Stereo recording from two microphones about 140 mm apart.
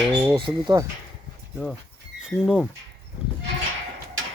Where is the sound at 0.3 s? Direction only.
35° right (ahead or behind).